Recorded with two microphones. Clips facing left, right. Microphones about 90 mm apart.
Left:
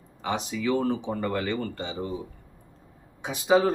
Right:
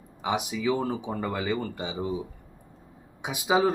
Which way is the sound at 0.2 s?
10° right (ahead or behind).